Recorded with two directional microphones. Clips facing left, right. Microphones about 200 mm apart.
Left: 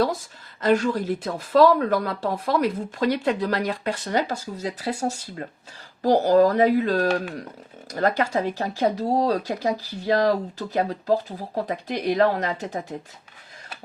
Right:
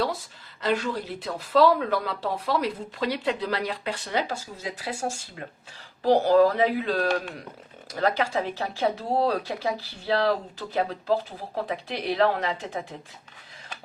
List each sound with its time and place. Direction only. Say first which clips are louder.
0.6 s speech: left 6 dB; 45° left (ahead or behind)